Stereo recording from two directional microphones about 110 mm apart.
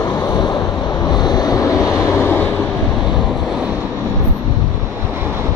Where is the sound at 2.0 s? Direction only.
20° left (ahead or behind).